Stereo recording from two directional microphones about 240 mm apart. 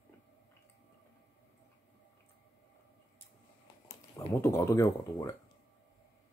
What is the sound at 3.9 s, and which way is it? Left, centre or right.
Speech, centre.